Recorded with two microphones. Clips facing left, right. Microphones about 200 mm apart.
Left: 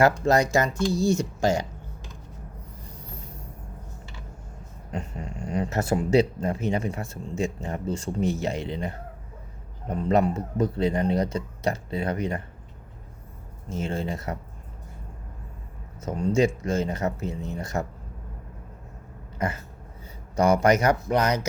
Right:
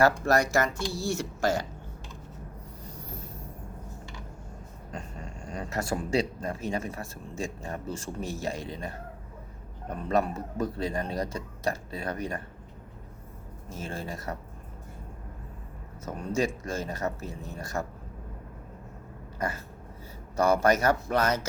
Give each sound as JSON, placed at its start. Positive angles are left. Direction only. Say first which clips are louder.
{"t": 0.0, "sound": "speech", "louder": "left 3 dB", "side_deg": 20}
{"t": 5.6, "sound": "speech", "louder": "left 4 dB", "side_deg": 25}
{"t": 9.9, "sound": "speech", "louder": "left 5 dB", "side_deg": 20}
{"t": 13.7, "sound": "speech", "louder": "left 7 dB", "side_deg": 20}
{"t": 16.0, "sound": "speech", "louder": "left 6 dB", "side_deg": 20}
{"t": 19.4, "sound": "speech", "louder": "left 3 dB", "side_deg": 20}